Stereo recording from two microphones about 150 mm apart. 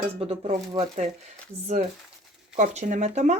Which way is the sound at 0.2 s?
45° right (ahead or behind).